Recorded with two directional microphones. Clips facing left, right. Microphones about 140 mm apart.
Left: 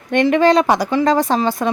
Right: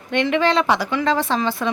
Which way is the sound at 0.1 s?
45° left (ahead or behind).